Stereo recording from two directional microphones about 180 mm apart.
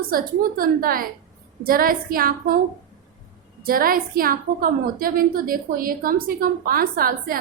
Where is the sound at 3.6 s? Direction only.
55° right (ahead or behind).